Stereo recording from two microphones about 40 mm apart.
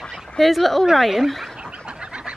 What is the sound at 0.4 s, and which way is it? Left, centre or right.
Speech, centre.